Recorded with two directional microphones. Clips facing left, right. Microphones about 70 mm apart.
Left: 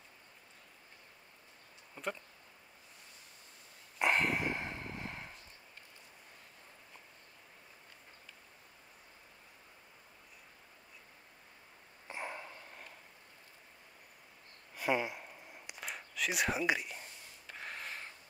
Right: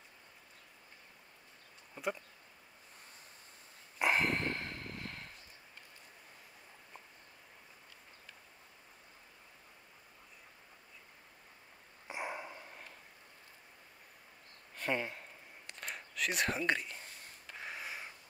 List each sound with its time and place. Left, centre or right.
2.0 s speech: centre
4.0 s dog: centre
4.5 s vehicle: centre
12.1 s dog: centre
14.8 s a sound: centre
17.6 s a sound: centre